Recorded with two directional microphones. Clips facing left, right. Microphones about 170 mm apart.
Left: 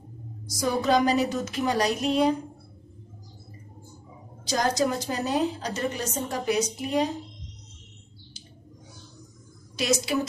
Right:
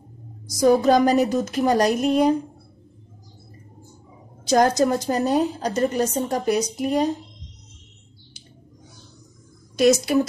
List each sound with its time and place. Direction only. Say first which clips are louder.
0.6 s a woman's voice: right 7 dB; 45° right (ahead or behind)
4.5 s a woman's voice: right 7 dB; 55° right (ahead or behind)
10.1 s a woman's voice: right 7 dB; 50° right (ahead or behind)